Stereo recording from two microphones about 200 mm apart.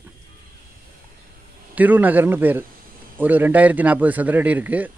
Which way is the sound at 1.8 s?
10° right (ahead or behind).